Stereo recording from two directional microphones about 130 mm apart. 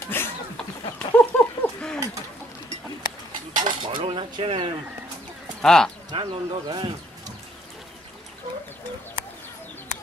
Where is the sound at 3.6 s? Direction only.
40° right (ahead or behind).